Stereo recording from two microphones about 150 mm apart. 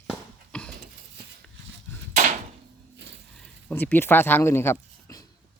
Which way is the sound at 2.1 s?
60° right (ahead or behind).